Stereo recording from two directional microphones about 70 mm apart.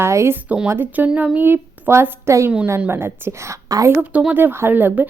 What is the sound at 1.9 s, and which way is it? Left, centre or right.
A woman's voice, right.